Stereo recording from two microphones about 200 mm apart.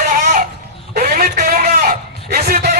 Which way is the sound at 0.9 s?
45° right (ahead or behind).